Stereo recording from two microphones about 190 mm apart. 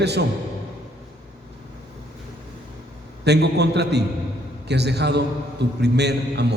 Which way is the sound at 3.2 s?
60° right (ahead or behind).